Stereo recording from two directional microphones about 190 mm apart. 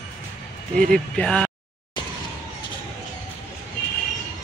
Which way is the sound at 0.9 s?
5° left (ahead or behind).